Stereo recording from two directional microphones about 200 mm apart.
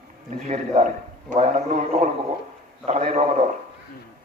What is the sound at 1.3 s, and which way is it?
A man's voice, 35° right (ahead or behind).